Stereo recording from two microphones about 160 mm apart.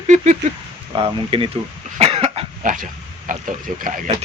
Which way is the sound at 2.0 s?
40° right (ahead or behind).